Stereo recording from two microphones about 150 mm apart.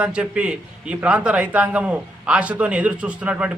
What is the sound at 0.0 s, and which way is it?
A man's voice, 10° right (ahead or behind).